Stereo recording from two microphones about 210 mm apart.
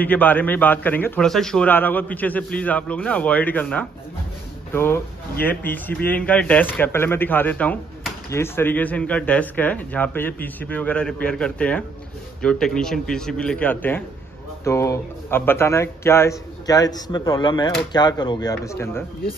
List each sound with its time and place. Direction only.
0.0 s a man's voice: 10° left (ahead or behind)